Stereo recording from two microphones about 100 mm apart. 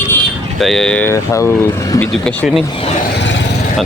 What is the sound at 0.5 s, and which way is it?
Speech, 5° left (ahead or behind).